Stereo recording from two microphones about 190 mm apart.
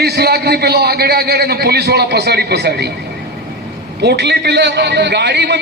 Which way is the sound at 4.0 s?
65° right (ahead or behind).